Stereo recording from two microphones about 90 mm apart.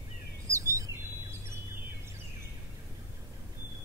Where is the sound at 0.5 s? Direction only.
35° right (ahead or behind).